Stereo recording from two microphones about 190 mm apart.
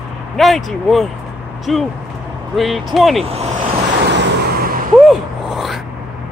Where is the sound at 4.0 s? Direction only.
60° right (ahead or behind).